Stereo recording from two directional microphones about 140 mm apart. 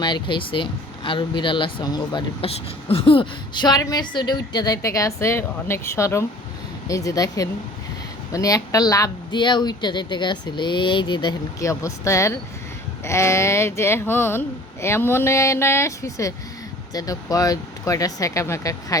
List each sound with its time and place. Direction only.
0.0 s speech: 35° left (ahead or behind)
2.4 s speech: 40° left (ahead or behind)
11.6 s speech: 20° left (ahead or behind)